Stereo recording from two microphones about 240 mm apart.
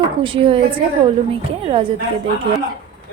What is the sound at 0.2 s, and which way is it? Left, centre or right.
A woman's voice, right.